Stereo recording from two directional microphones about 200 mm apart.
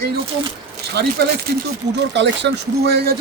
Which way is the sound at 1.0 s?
55° right (ahead or behind).